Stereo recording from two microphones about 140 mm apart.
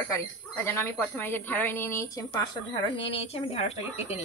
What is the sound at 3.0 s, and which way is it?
A woman's voice, 40° left (ahead or behind).